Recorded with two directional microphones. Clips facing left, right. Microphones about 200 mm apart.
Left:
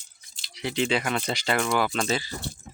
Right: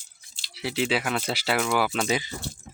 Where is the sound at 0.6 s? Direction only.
5° right (ahead or behind).